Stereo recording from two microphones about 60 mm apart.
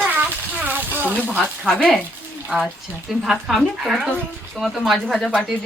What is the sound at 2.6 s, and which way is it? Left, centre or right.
A woman's voice, centre.